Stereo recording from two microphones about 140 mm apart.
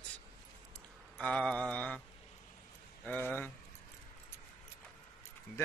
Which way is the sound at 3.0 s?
10° left (ahead or behind).